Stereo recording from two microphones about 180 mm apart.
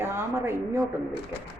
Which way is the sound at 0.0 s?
15° right (ahead or behind).